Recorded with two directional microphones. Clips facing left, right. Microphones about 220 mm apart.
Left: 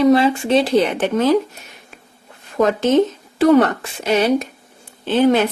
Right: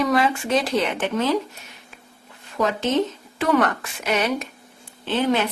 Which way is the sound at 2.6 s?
50° left (ahead or behind).